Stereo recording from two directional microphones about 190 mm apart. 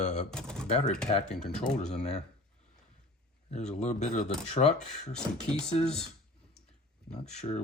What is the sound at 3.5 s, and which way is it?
Speech, 35° left (ahead or behind).